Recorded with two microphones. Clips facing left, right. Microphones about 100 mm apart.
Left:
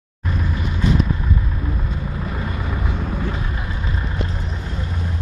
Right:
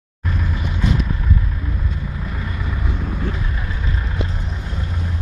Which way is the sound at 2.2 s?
40° left (ahead or behind).